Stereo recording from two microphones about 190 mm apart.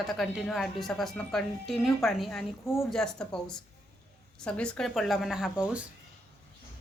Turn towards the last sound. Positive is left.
turn(degrees=-5)  # may be behind; listen again after turning